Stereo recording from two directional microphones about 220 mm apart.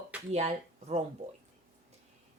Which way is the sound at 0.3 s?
30° right (ahead or behind).